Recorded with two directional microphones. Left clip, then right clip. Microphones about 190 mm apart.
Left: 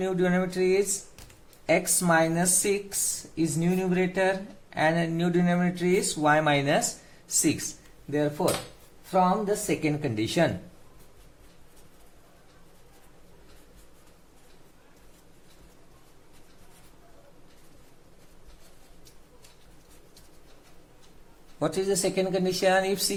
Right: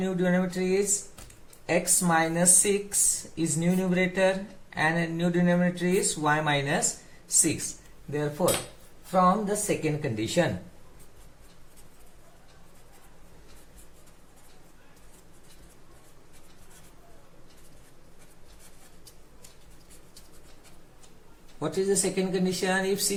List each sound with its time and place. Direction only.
0.0 s speech: 55° left (ahead or behind)
21.6 s speech: 55° left (ahead or behind)